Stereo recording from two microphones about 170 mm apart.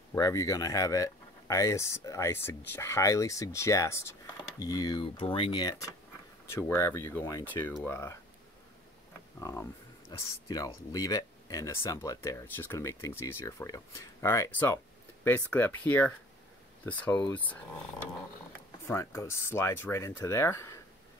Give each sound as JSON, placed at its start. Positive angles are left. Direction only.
{"t": 0.1, "sound": "speech", "side_deg": 20}
{"t": 9.4, "sound": "speech", "side_deg": 15}
{"t": 18.9, "sound": "speech", "side_deg": 15}